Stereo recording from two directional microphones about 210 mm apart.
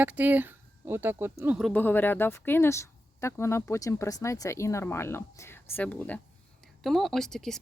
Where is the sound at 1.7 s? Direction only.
10° left (ahead or behind).